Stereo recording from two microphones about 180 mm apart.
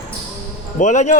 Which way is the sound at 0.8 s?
40° left (ahead or behind).